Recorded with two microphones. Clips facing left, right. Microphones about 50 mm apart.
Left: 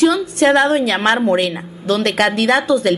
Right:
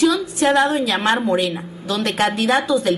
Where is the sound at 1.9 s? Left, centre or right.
Left.